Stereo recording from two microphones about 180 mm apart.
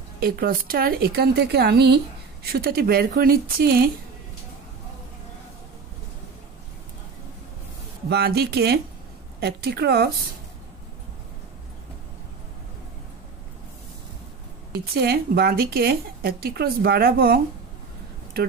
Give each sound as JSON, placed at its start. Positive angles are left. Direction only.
{"t": 0.2, "sound": "speech", "side_deg": -55}
{"t": 8.1, "sound": "speech", "side_deg": -65}
{"t": 14.7, "sound": "speech", "side_deg": -60}